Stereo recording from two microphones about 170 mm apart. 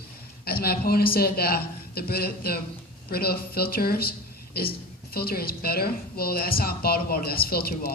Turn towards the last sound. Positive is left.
turn(degrees=65)  # may be behind; listen again after turning